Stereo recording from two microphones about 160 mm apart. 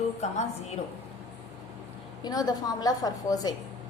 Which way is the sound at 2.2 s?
25° left (ahead or behind).